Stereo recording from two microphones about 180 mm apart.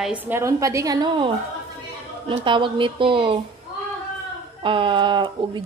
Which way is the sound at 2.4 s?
25° right (ahead or behind).